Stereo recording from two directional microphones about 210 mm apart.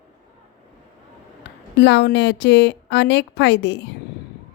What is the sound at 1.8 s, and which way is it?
Speech, 55° left (ahead or behind).